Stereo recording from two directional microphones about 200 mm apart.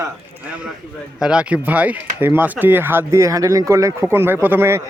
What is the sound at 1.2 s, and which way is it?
Speech, 5° right (ahead or behind).